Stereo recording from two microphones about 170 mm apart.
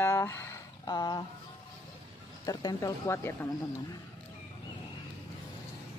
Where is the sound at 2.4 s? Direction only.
20° left (ahead or behind).